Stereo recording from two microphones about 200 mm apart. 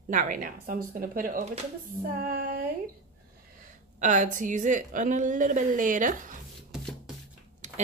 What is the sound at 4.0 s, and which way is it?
A woman's voice, 40° right (ahead or behind).